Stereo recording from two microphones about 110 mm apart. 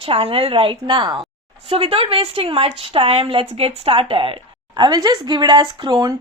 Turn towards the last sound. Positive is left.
turn(degrees=-45)  # may be behind; listen again after turning